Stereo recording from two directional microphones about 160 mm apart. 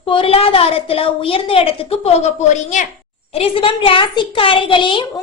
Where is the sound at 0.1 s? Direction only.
35° left (ahead or behind).